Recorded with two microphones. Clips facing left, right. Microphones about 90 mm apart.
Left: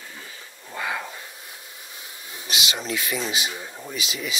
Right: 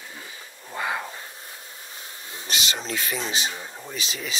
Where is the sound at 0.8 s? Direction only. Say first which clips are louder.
Right 1 dB; 30° right (ahead or behind).